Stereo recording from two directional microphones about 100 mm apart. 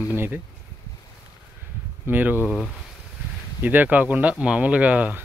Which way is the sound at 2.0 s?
20° right (ahead or behind).